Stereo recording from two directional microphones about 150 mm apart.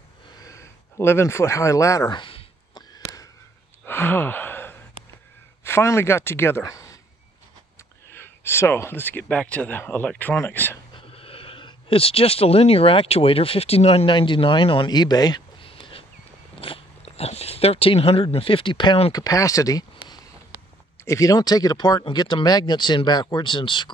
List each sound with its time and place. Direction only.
0.4 s a sound: 20° left (ahead or behind)
3.8 s a sound: 15° left (ahead or behind)
5.6 s speech: 15° left (ahead or behind)
8.1 s speech: 15° left (ahead or behind)
11.0 s speech: 40° left (ahead or behind)
19.1 s speech: 25° left (ahead or behind)
21.0 s speech: 20° left (ahead or behind)